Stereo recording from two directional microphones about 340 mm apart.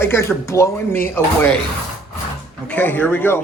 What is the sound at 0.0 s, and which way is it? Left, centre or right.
Speech, centre.